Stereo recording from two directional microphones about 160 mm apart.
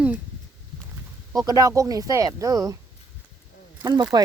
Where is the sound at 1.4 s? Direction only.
20° right (ahead or behind).